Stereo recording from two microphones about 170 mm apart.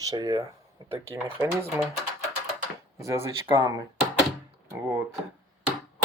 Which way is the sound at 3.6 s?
20° right (ahead or behind).